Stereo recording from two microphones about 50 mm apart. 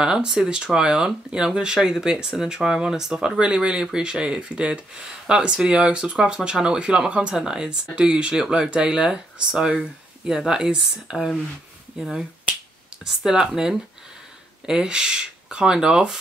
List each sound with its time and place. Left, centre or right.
0.0 s speech: centre